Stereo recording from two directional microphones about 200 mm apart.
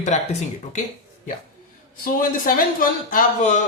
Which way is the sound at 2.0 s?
45° left (ahead or behind).